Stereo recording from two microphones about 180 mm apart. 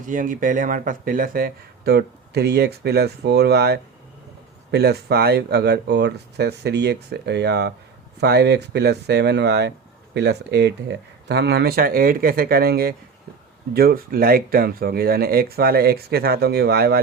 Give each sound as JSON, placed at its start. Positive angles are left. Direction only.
{"t": 0.0, "sound": "speech", "side_deg": -45}